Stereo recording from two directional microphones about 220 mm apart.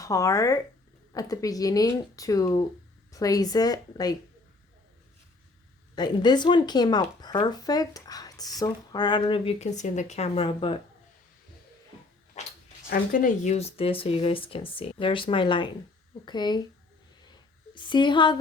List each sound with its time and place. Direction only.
0.0 s speech: 15° left (ahead or behind)
6.0 s speech: 20° left (ahead or behind)
12.9 s speech: 35° left (ahead or behind); by 16.6 s 20° left (ahead or behind)
17.7 s speech: 20° left (ahead or behind)